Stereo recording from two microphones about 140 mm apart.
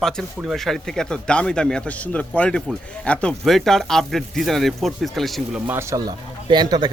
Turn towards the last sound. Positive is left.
turn(degrees=-30)  # may be behind; listen again after turning